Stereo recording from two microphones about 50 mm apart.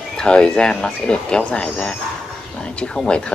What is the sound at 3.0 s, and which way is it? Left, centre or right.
Speech, centre.